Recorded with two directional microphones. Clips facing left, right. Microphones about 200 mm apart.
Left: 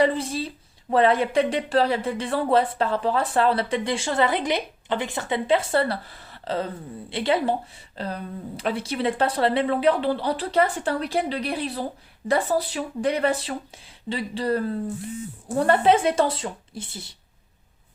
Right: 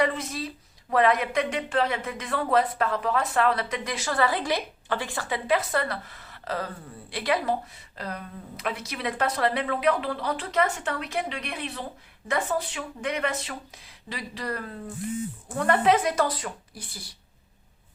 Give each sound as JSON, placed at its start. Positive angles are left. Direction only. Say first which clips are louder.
{"t": 0.0, "sound": "speech", "louder": "left 5 dB", "side_deg": 30}